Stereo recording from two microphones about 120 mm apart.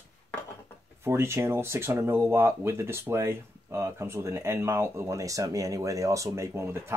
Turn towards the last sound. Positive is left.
turn(degrees=-20)  # may be behind; listen again after turning